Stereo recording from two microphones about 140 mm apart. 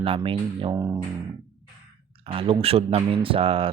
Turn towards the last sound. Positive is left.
turn(degrees=-40)  # may be behind; listen again after turning